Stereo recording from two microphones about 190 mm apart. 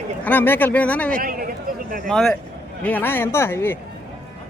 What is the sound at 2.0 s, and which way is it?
A man's voice, centre (ahead or behind).